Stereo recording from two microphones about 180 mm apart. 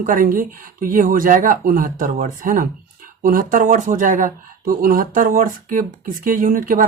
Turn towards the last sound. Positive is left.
turn(degrees=-50)  # may be behind; listen again after turning